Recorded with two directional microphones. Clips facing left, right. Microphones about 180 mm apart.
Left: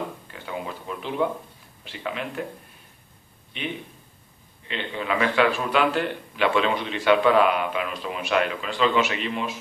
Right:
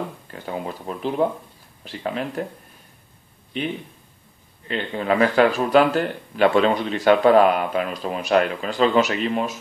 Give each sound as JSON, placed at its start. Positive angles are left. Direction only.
{"t": 0.3, "sound": "speech", "side_deg": -40}
{"t": 4.6, "sound": "speech", "side_deg": -45}